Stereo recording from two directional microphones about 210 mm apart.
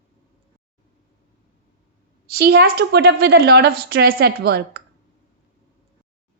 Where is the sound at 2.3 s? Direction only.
50° right (ahead or behind).